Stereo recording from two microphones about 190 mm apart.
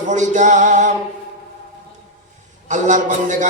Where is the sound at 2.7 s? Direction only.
40° right (ahead or behind).